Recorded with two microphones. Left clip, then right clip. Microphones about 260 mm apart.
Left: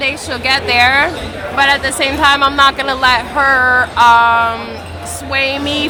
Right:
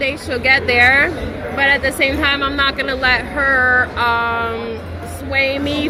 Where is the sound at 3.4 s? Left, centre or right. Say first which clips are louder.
Left 3 dB; left.